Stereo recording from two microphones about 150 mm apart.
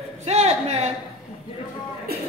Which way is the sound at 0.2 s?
45° right (ahead or behind).